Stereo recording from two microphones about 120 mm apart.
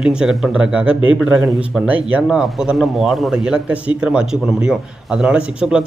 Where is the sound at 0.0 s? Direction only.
5° right (ahead or behind).